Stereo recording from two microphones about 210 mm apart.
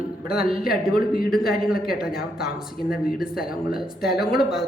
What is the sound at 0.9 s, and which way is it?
A man's voice, 45° left (ahead or behind).